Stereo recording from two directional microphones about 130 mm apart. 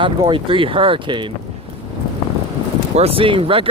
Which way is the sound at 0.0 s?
40° right (ahead or behind).